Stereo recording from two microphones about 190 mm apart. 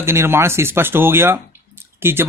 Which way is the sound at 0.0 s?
15° right (ahead or behind).